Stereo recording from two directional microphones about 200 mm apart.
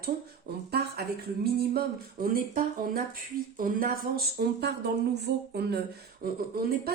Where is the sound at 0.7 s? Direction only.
50° right (ahead or behind).